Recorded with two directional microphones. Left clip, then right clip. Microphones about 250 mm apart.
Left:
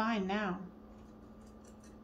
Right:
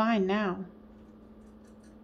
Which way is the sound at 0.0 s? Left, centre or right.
Right.